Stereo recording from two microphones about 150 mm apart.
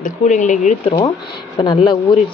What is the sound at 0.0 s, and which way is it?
Speech, 55° left (ahead or behind).